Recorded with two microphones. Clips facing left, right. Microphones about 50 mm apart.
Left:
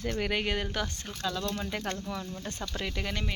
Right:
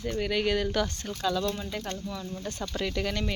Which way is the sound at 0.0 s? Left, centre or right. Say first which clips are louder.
Right 1 dB; left.